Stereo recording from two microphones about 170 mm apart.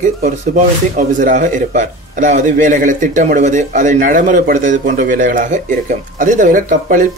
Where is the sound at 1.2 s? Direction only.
50° right (ahead or behind).